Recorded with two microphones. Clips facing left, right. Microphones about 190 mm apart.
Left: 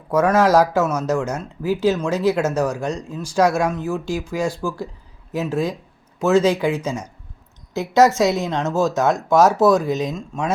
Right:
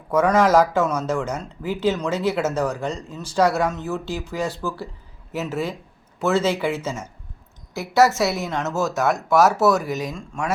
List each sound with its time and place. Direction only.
0.1 s speech: 10° left (ahead or behind)